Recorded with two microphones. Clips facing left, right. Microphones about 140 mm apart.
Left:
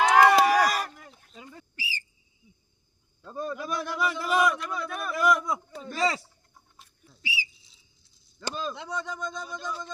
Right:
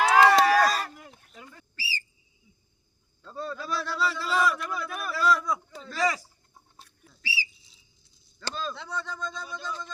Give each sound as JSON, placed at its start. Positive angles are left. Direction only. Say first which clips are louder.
{"t": 0.1, "sound": "a sound", "louder": "right 1 dB", "side_deg": 10}
{"t": 3.2, "sound": "a man's voice", "louder": "left 2 dB", "side_deg": 15}
{"t": 4.6, "sound": "a man's voice", "louder": "left 1 dB", "side_deg": 0}
{"t": 5.1, "sound": "a man's voice", "louder": "left 1 dB", "side_deg": 20}
{"t": 7.2, "sound": "whistle", "louder": "even", "side_deg": 15}
{"t": 7.6, "sound": "whistle", "louder": "right 1 dB", "side_deg": 0}
{"t": 8.4, "sound": "a man's voice", "louder": "left 1 dB", "side_deg": 15}